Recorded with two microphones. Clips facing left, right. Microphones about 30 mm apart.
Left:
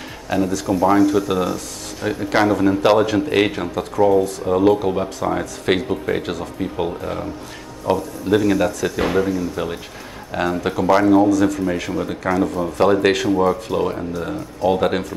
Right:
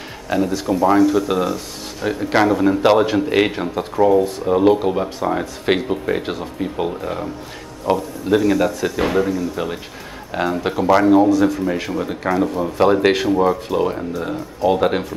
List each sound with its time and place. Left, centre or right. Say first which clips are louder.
0.5 s speech: even; right
0.7 s speech: right 1 dB; centre
11.2 s speech: right 1 dB; centre
11.6 s speech: even; centre
12.4 s speech: right 1 dB; centre
12.6 s speech: right 1 dB; centre